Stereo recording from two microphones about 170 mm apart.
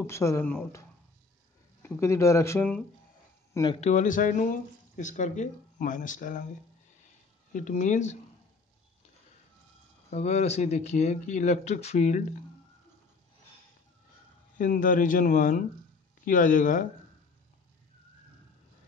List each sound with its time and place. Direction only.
0.0 s speech: 15° left (ahead or behind)
1.8 s speech: 15° left (ahead or behind)
3.5 s speech: 25° left (ahead or behind)
3.8 s speech: 50° left (ahead or behind)
7.5 s speech: 50° left (ahead or behind)
10.0 s speech: 40° left (ahead or behind)
14.6 s speech: 50° left (ahead or behind)